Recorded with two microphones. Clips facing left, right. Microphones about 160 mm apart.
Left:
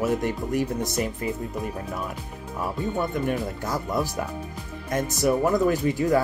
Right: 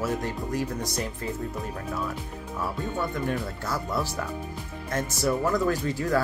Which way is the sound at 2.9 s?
15° left (ahead or behind).